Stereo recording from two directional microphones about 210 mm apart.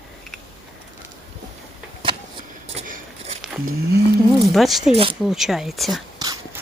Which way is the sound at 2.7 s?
35° right (ahead or behind).